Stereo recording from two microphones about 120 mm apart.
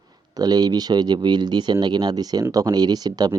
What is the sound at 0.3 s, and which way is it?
A man's voice, 35° right (ahead or behind).